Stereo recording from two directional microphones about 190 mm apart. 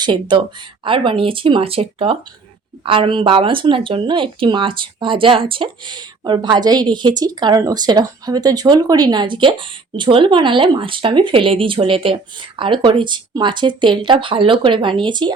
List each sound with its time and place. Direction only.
0.0 s speech: 25° right (ahead or behind)